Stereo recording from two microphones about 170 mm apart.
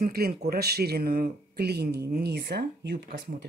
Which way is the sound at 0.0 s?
60° right (ahead or behind).